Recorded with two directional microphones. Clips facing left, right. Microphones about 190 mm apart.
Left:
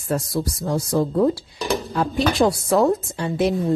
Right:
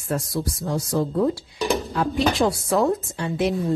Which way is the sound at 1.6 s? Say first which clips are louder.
Right 1 dB; centre (ahead or behind).